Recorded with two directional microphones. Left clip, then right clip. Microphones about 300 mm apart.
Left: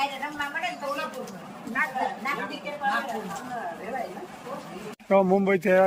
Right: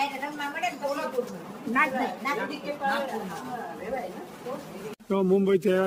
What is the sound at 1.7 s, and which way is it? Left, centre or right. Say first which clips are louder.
Speech: right 2 dB; right.